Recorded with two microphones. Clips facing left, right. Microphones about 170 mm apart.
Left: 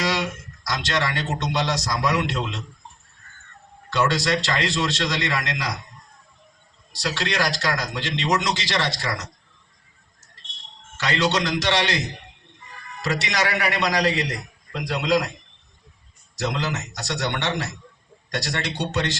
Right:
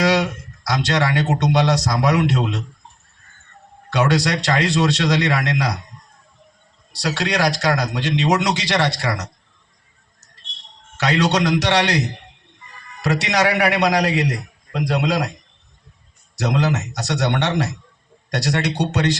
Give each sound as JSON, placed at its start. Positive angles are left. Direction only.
{"t": 0.0, "sound": "a sound", "side_deg": -65}
{"t": 0.7, "sound": "a man's voice", "side_deg": -70}
{"t": 3.8, "sound": "a man's voice", "side_deg": -70}
{"t": 7.0, "sound": "a man's voice", "side_deg": -70}
{"t": 11.0, "sound": "a man's voice", "side_deg": -70}
{"t": 16.4, "sound": "a man's voice", "side_deg": -70}